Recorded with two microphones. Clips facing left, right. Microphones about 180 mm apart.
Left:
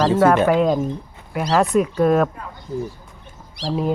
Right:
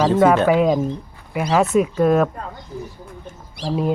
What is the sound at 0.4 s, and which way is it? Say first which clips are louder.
Speech: right 1 dB; 5° right (ahead or behind).